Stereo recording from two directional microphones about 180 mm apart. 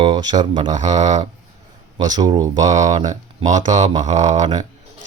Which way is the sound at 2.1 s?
20° right (ahead or behind).